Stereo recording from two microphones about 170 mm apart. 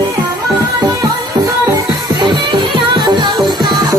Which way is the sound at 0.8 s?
20° right (ahead or behind).